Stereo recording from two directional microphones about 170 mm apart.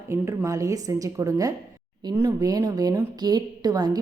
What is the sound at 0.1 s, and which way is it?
A woman's voice, 15° right (ahead or behind).